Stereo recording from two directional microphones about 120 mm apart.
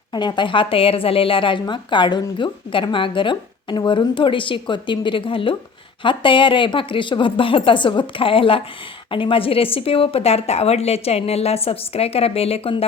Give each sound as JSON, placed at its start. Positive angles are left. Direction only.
{"t": 0.1, "sound": "a woman's voice", "side_deg": 35}